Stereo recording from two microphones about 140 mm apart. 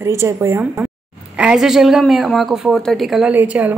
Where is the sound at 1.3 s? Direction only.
5° right (ahead or behind).